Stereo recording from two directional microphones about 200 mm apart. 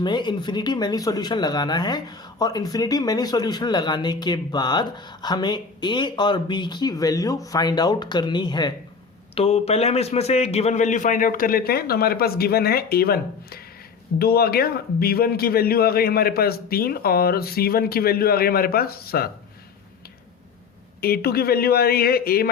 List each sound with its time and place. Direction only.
0.0 s a man's voice: 20° left (ahead or behind); by 19.3 s 50° left (ahead or behind)
21.0 s a man's voice: 50° left (ahead or behind)